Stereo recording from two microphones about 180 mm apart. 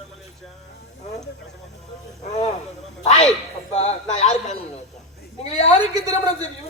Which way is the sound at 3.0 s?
35° left (ahead or behind).